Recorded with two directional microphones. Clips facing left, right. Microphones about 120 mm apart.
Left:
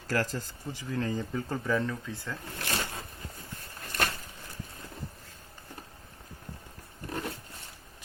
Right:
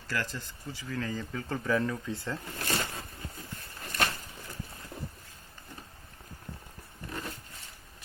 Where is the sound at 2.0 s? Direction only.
20° right (ahead or behind).